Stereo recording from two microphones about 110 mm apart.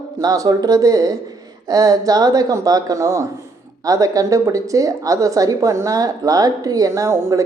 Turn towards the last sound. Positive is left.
turn(degrees=-30)  # may be behind; listen again after turning